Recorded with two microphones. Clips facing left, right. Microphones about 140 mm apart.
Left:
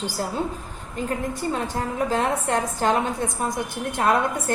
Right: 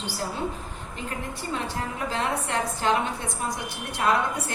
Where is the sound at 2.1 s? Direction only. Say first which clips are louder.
Left 4 dB; 45° left (ahead or behind).